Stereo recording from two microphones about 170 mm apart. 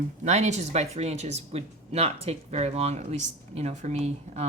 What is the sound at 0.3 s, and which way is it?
Speech, 40° right (ahead or behind).